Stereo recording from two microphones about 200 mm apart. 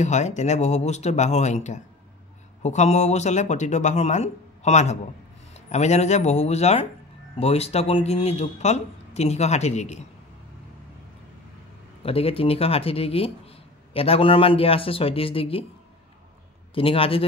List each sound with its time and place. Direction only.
0.0 s speech: 35° left (ahead or behind)
12.0 s speech: 30° left (ahead or behind)
16.7 s speech: 25° left (ahead or behind)